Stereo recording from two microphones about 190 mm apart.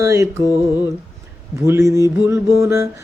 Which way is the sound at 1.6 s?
15° right (ahead or behind).